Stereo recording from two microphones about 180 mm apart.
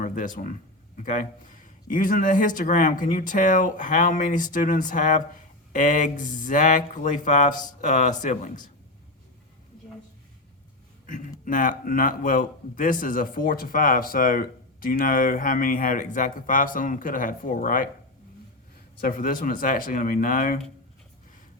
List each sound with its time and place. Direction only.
0.0 s a man's voice: 50° left (ahead or behind)
11.1 s a man's voice: 45° left (ahead or behind)
18.9 s a man's voice: 50° left (ahead or behind)